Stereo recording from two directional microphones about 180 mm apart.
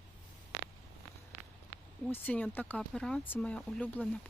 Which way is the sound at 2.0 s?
10° left (ahead or behind).